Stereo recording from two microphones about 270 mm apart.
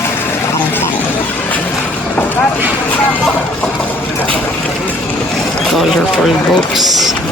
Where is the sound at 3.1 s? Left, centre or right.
Centre.